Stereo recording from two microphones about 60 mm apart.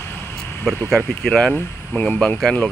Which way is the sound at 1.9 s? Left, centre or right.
Left.